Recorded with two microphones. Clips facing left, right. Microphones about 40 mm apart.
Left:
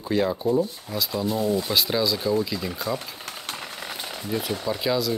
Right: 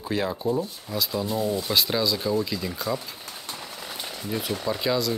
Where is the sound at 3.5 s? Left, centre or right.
Left.